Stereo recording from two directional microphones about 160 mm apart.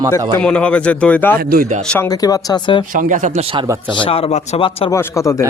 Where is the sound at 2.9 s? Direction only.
55° right (ahead or behind).